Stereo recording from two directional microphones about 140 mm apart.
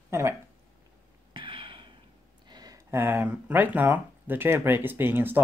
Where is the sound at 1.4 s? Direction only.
35° right (ahead or behind).